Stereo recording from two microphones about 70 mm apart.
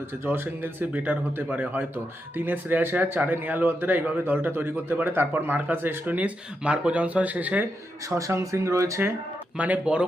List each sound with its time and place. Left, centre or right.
0.3 s speech: right
8.1 s speech: right
9.6 s speech: right